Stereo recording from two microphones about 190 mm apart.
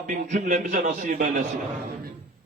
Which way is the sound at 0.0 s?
45° right (ahead or behind).